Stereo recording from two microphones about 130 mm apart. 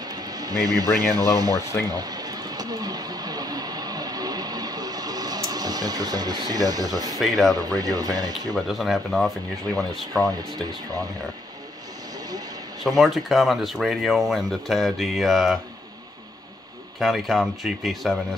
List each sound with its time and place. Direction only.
0.0 s speech: 30° right (ahead or behind)
1.9 s a sound: 30° right (ahead or behind)
7.2 s speech: centre (ahead or behind)
7.5 s speech: 30° right (ahead or behind)
8.5 s speech: centre (ahead or behind)
12.8 s speech: centre (ahead or behind)
17.0 s speech: centre (ahead or behind)